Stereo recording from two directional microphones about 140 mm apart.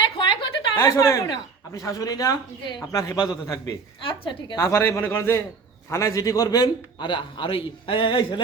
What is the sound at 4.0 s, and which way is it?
Speech, 40° left (ahead or behind).